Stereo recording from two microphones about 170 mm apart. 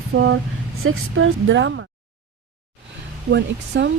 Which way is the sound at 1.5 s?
90° right.